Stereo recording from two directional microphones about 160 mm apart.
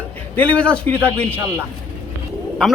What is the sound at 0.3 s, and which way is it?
Speech, 10° left (ahead or behind).